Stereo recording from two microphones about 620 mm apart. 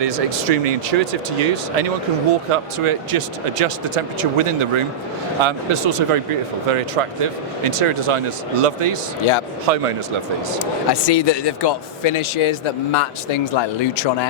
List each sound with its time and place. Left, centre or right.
0.0 s speech: right
2.5 s speech: right
9.7 s speech: right
10.6 s speech: left